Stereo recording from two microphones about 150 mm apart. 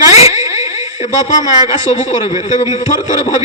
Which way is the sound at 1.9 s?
50° left (ahead or behind).